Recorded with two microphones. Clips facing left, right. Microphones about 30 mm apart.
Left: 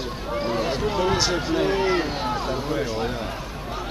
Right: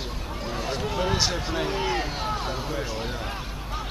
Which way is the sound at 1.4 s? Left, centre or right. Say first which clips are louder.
Left 5 dB; centre.